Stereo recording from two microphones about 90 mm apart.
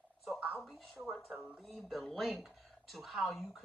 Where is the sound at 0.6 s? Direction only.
5° right (ahead or behind).